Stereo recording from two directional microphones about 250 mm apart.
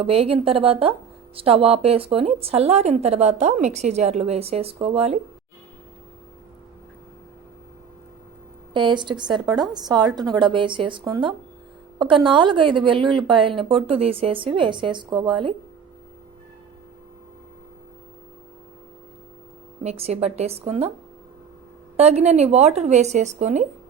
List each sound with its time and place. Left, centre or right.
0.0 s a woman's voice: right
8.7 s a woman's voice: centre
19.8 s a woman's voice: right
21.9 s a woman's voice: right